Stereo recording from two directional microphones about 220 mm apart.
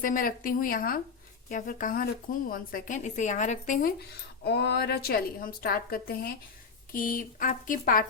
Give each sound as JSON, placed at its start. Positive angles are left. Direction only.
{"t": 0.0, "sound": "speech", "side_deg": 40}